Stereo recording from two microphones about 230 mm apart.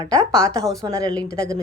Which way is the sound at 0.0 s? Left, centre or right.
Right.